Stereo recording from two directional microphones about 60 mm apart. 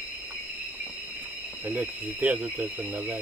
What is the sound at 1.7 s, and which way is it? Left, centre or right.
Speech, right.